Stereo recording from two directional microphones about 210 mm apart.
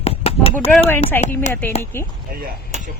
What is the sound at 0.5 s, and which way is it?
Speech, 10° left (ahead or behind).